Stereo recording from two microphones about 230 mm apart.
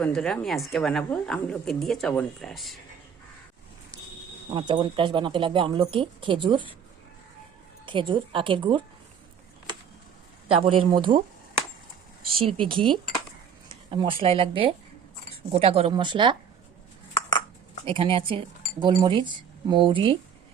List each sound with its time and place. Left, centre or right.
0.0 s a woman's voice: centre
4.5 s speech: centre
7.9 s speech: right
10.5 s speech: right
12.4 s speech: right
17.8 s speech: right